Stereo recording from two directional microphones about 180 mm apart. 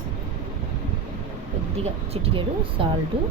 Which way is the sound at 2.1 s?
30° right (ahead or behind).